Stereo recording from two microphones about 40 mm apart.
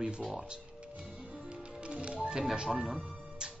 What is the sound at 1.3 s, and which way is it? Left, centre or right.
Music, right.